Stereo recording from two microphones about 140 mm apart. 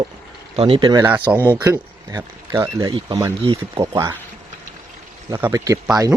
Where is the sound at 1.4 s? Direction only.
15° right (ahead or behind).